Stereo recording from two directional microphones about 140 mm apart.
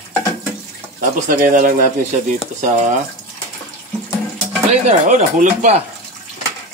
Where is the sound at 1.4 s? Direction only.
70° right (ahead or behind).